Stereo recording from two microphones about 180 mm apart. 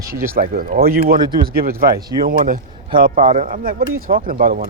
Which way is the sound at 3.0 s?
45° right (ahead or behind).